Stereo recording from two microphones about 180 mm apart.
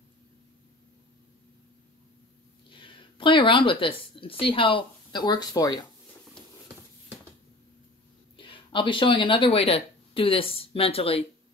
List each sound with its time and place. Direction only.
2.7 s a sound: 30° left (ahead or behind)
4.1 s speech: 30° left (ahead or behind)
8.4 s speech: 30° left (ahead or behind)